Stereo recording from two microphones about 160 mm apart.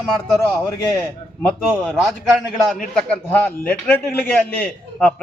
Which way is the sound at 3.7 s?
15° left (ahead or behind).